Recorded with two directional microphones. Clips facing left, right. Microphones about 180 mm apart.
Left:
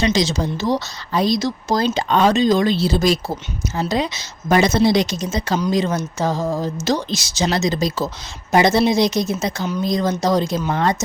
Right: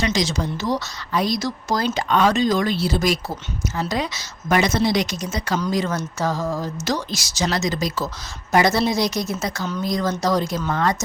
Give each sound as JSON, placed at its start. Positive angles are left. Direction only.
{"t": 0.0, "sound": "speech", "side_deg": 25}